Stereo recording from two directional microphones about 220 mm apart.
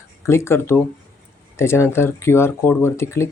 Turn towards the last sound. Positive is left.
turn(degrees=10)  # may be behind; listen again after turning